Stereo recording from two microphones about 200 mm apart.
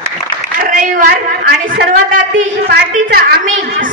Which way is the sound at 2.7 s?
50° right (ahead or behind).